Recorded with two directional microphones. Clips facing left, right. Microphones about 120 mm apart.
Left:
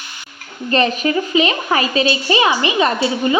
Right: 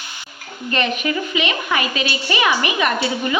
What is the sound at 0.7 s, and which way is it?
A woman's voice, 35° left (ahead or behind).